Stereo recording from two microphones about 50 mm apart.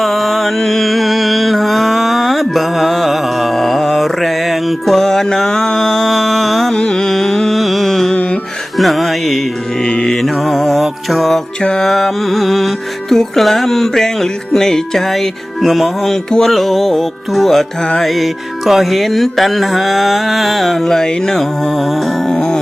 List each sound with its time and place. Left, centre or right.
0.0 s music: centre
6.7 s music: centre
8.1 s music: left
8.8 s music: centre
9.8 s mantra: centre
10.2 s mantra: centre
11.6 s music: centre
11.9 s music: centre